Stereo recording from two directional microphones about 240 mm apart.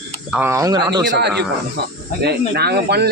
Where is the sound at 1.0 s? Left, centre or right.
Right.